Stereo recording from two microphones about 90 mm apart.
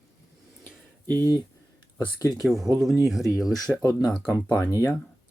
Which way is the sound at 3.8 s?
35° left (ahead or behind).